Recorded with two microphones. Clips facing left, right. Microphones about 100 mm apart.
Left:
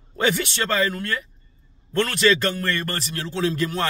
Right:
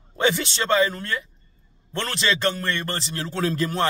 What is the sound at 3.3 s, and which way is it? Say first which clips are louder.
Speech: left 1 dB; 40° right (ahead or behind).